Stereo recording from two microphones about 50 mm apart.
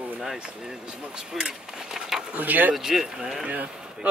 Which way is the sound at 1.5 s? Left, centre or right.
Centre.